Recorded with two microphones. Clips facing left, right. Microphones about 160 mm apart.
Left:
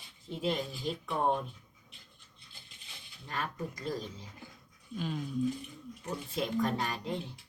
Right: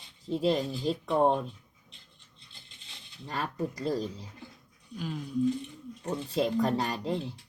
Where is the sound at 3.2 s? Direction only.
35° right (ahead or behind).